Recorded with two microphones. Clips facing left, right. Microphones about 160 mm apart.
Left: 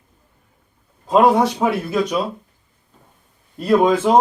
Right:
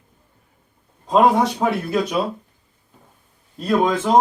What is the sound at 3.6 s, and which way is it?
Speech, 10° left (ahead or behind).